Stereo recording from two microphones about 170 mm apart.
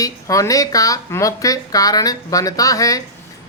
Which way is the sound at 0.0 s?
20° left (ahead or behind).